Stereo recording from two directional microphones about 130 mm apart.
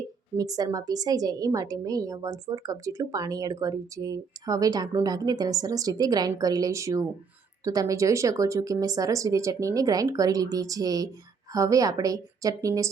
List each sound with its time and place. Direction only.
0.3 s a woman's voice: 30° right (ahead or behind)